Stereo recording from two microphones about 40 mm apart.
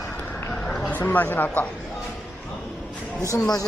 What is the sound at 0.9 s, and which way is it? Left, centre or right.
Speech, left.